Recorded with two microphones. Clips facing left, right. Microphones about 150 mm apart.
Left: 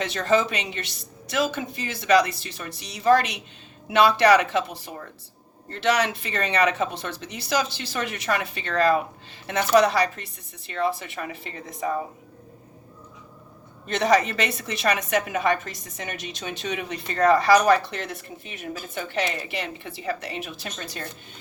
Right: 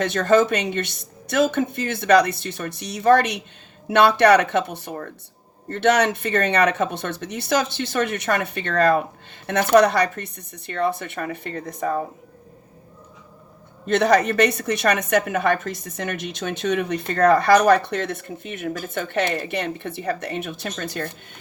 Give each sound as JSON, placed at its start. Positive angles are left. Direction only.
{"t": 0.0, "sound": "a woman's voice", "side_deg": -50}
{"t": 13.8, "sound": "a woman's voice", "side_deg": -55}